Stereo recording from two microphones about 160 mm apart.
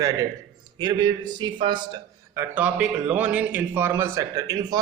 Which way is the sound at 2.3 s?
10° right (ahead or behind).